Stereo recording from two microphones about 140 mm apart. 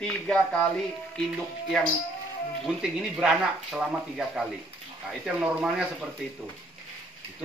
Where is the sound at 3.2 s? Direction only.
5° right (ahead or behind).